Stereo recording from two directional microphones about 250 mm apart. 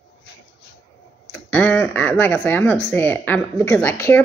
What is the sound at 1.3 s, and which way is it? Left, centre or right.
A woman's voice, centre.